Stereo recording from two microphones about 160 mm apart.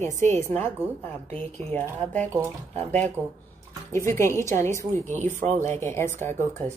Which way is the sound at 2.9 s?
10° left (ahead or behind).